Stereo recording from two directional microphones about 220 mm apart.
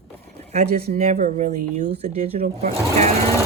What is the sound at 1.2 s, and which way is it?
Speech, 35° right (ahead or behind).